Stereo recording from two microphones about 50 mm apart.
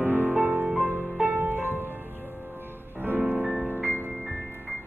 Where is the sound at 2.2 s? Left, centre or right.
Centre.